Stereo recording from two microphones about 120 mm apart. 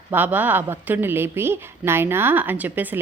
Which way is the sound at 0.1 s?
15° right (ahead or behind).